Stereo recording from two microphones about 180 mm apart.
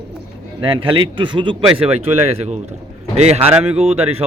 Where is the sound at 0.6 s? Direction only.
30° right (ahead or behind).